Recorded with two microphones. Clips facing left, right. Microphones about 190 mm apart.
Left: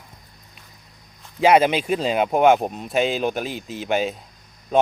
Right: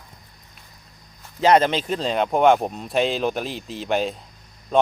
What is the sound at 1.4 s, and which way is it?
Speech, 10° left (ahead or behind).